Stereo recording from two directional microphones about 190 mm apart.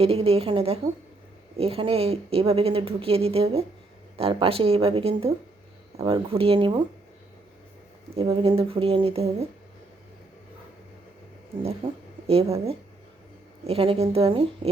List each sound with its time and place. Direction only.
0.0 s a woman's voice: 30° right (ahead or behind)
8.1 s a woman's voice: 30° right (ahead or behind)
11.6 s a woman's voice: 30° right (ahead or behind)
13.7 s a woman's voice: 30° right (ahead or behind)